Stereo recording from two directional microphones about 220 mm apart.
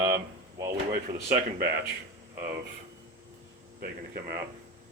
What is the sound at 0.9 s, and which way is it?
Speech, 40° right (ahead or behind).